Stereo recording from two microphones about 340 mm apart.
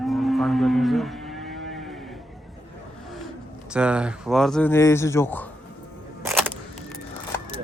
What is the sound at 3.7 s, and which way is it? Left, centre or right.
Speech, centre.